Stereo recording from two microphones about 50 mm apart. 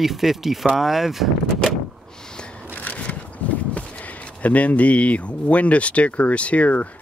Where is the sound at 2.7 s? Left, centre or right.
Left.